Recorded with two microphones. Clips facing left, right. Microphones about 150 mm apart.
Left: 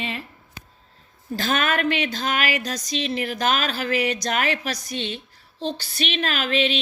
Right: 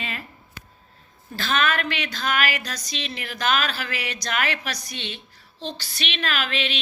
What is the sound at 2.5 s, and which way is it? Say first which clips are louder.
A woman's voice: left 6 dB; 35° left (ahead or behind).